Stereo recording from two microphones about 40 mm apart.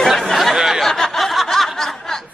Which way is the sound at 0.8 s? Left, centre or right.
Centre.